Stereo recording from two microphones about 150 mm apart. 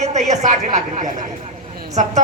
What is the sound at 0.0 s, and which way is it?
Speech, 50° right (ahead or behind).